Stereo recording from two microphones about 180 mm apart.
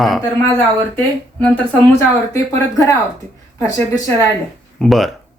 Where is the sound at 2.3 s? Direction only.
15° left (ahead or behind).